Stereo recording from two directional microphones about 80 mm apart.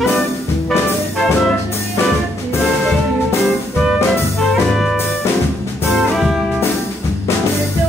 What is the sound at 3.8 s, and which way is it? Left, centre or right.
Music, centre.